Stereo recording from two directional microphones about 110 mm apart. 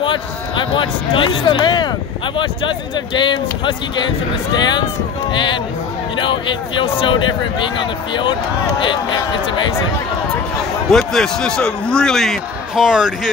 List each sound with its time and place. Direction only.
0.0 s speech: 50° left (ahead or behind)
10.9 s a man's voice: 5° left (ahead or behind)